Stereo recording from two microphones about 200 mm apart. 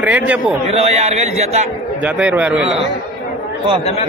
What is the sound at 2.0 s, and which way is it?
Speech, 5° right (ahead or behind).